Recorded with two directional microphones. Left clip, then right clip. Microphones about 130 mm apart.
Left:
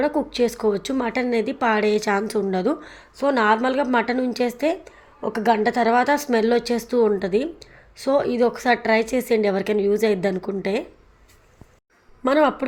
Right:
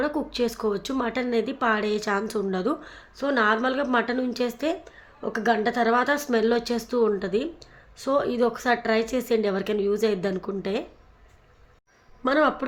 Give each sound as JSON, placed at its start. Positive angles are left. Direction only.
{"t": 0.0, "sound": "speech", "side_deg": 25}
{"t": 12.2, "sound": "speech", "side_deg": 30}